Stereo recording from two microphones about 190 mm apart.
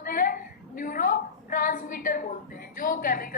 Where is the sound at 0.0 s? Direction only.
45° left (ahead or behind).